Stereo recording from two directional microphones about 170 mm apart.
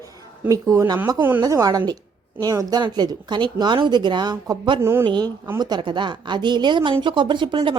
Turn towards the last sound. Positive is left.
turn(degrees=-30)  # may be behind; listen again after turning